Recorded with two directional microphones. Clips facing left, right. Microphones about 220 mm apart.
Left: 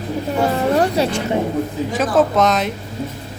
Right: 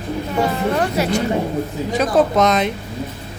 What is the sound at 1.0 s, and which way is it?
Speech, 30° left (ahead or behind).